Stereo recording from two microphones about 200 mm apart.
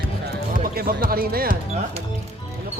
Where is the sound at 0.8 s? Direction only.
50° right (ahead or behind).